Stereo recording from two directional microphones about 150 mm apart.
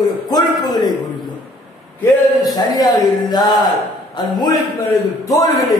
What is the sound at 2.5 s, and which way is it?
A man's voice, 25° left (ahead or behind).